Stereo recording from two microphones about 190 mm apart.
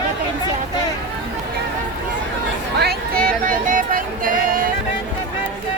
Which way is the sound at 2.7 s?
55° right (ahead or behind).